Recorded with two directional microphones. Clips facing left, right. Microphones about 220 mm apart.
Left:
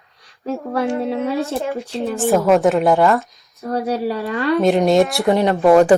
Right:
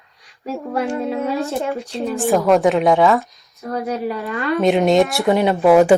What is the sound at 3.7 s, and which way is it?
Speech, 35° left (ahead or behind).